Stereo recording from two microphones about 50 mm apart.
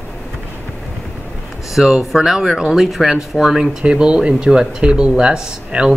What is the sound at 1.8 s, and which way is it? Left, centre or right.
Speech, centre.